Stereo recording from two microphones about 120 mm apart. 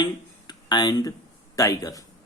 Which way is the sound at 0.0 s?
35° left (ahead or behind).